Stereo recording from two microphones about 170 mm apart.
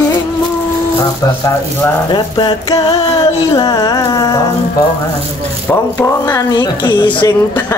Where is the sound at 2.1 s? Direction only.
25° left (ahead or behind).